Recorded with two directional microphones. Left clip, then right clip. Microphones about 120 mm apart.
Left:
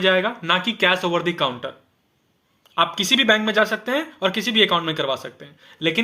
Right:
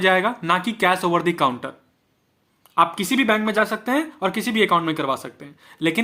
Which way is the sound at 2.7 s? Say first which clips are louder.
Even; 30° right (ahead or behind).